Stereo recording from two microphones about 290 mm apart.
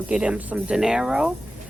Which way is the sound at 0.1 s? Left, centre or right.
Centre.